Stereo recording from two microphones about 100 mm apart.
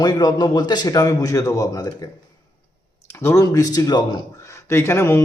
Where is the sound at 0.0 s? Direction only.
45° left (ahead or behind).